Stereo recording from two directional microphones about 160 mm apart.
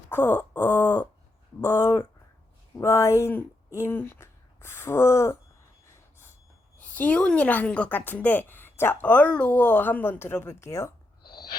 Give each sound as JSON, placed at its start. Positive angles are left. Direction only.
{"t": 0.1, "sound": "a woman's voice", "side_deg": 10}
{"t": 6.7, "sound": "a woman's voice", "side_deg": 10}